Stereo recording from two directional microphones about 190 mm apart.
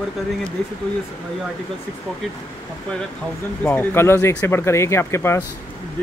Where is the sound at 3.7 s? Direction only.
10° left (ahead or behind).